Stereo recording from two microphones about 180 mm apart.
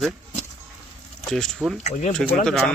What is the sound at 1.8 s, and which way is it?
Speech, 40° left (ahead or behind).